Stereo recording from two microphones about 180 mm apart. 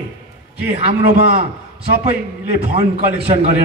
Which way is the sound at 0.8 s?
50° right (ahead or behind).